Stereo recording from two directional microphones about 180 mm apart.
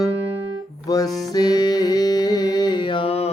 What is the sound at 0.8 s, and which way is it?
Music, 20° left (ahead or behind).